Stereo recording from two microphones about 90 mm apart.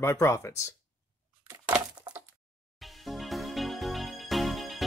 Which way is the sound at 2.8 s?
Centre (ahead or behind).